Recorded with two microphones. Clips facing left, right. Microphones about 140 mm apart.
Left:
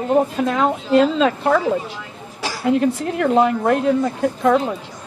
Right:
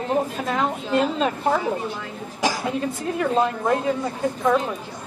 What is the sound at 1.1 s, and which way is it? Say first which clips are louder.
Speech: left 5 dB; 90° left.